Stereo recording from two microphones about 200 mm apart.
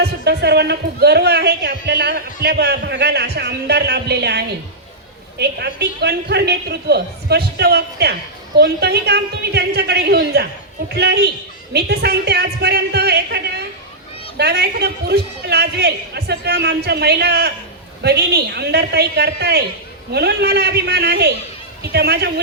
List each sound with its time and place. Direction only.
0.0 s a man's voice: 55° right (ahead or behind)